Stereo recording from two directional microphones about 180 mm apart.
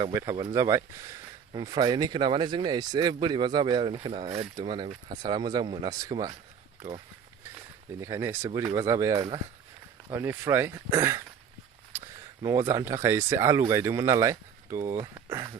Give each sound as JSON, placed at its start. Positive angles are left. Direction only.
{"t": 0.0, "sound": "speech", "side_deg": -20}
{"t": 8.0, "sound": "speech", "side_deg": -15}
{"t": 12.4, "sound": "speech", "side_deg": -20}